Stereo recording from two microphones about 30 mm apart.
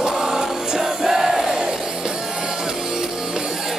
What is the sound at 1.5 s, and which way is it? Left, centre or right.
Music, right.